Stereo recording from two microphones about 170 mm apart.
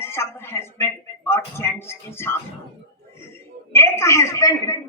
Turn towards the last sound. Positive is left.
turn(degrees=20)  # may be behind; listen again after turning